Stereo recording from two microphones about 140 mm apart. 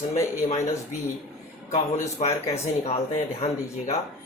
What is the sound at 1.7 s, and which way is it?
Speech, 45° left (ahead or behind).